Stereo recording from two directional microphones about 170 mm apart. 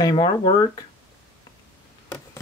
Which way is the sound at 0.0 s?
25° left (ahead or behind).